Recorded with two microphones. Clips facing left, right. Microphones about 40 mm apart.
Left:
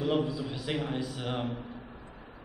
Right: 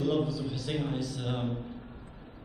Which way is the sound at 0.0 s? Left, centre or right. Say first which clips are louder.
Even; left.